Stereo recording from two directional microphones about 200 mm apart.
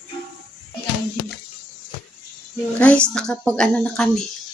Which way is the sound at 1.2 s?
90° left.